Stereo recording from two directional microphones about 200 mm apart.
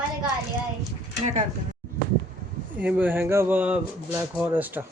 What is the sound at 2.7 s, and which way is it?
Speech, 10° right (ahead or behind).